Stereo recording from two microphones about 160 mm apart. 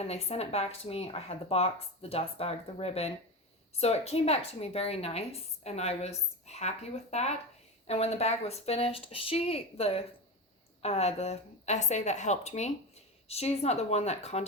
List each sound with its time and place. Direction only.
0.1 s a woman's voice: 40° left (ahead or behind)